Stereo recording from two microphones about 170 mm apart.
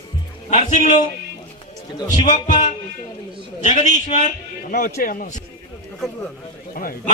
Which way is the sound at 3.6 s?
45° left (ahead or behind).